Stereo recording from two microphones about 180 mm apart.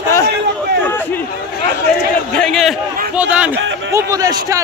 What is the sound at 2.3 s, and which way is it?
Speech, 5° left (ahead or behind).